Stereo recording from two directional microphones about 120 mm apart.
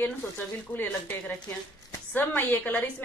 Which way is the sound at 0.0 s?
15° left (ahead or behind).